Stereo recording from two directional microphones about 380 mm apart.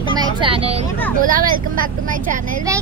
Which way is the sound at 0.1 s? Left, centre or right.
Centre.